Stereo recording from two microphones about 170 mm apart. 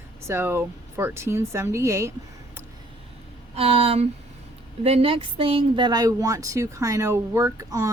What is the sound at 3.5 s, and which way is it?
Speech, 35° right (ahead or behind).